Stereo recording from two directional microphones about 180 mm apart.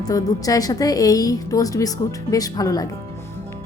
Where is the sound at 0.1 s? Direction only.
20° left (ahead or behind).